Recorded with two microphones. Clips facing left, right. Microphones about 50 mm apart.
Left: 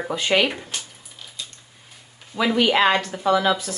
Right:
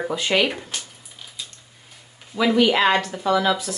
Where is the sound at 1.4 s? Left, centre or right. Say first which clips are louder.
Left 1 dB; centre.